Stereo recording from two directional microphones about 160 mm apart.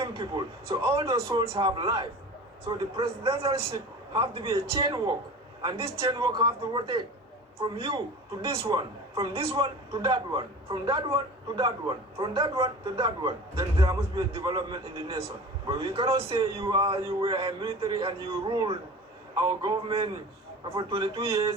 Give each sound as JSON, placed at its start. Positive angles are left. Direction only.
{"t": 0.0, "sound": "a man's voice", "side_deg": -30}